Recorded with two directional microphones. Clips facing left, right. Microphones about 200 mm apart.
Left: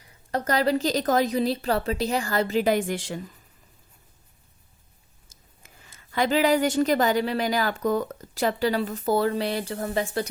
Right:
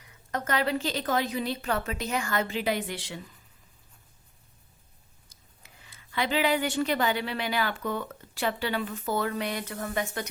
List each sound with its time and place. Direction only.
0.0 s a woman's voice: 35° left (ahead or behind)
5.3 s a woman's voice: 45° left (ahead or behind)